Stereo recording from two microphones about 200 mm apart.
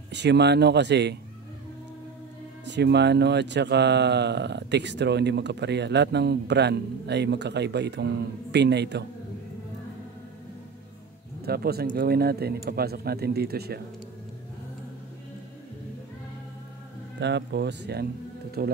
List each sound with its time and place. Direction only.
0.1 s speech: 60° right (ahead or behind)
2.6 s speech: 60° right (ahead or behind)
11.4 s speech: 50° right (ahead or behind)
17.2 s speech: 60° right (ahead or behind)
18.6 s speech: 45° right (ahead or behind)